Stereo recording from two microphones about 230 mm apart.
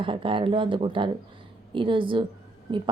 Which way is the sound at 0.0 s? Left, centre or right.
Right.